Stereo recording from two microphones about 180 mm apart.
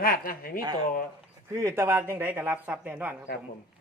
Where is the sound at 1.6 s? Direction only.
15° right (ahead or behind).